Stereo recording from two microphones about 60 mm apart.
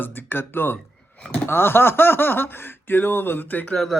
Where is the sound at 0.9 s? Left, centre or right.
Centre.